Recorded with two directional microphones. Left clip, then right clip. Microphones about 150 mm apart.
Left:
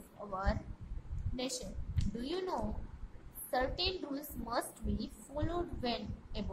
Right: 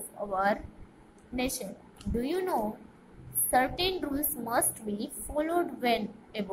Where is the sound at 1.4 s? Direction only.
10° right (ahead or behind).